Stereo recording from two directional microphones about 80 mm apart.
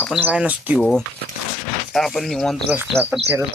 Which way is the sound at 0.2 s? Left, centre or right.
Centre.